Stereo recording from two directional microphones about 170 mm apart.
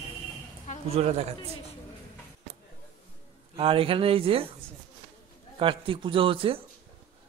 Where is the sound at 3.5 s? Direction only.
35° right (ahead or behind).